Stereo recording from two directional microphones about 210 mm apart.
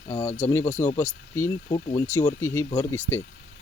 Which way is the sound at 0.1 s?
30° left (ahead or behind).